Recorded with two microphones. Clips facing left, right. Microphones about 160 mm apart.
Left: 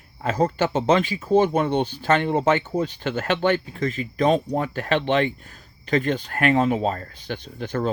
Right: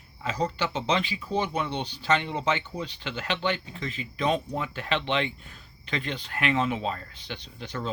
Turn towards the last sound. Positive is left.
turn(degrees=50)  # may be behind; listen again after turning